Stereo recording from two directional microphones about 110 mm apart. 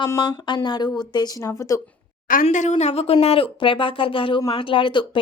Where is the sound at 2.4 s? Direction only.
90° left.